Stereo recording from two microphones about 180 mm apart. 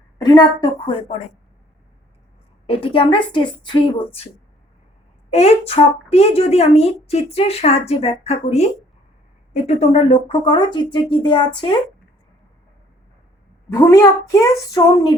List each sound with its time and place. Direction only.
0.2 s speech: 20° left (ahead or behind)
2.6 s speech: 30° left (ahead or behind)
5.3 s a woman's voice: 35° left (ahead or behind)
13.7 s speech: 15° left (ahead or behind)